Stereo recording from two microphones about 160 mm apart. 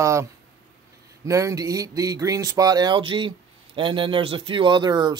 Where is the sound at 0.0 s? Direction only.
20° right (ahead or behind).